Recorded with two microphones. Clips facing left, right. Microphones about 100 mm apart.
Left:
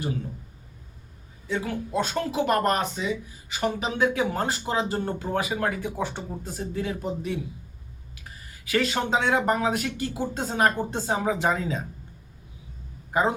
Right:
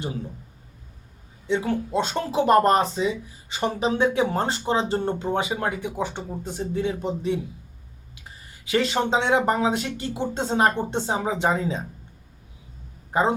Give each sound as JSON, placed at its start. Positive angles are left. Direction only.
{"t": 1.5, "sound": "speech", "side_deg": -25}